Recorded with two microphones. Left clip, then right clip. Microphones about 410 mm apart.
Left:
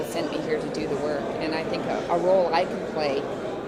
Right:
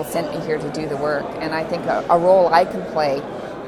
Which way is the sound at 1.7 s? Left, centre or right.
Right.